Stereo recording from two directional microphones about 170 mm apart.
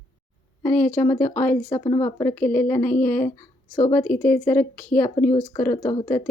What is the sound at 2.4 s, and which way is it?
Speech, 10° left (ahead or behind).